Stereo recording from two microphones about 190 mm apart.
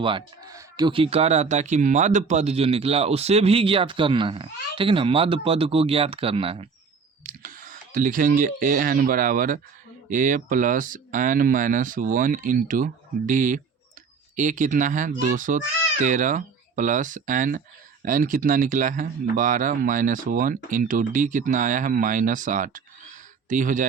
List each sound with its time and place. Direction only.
0.0 s speech: 25° right (ahead or behind)
7.3 s speech: 45° right (ahead or behind)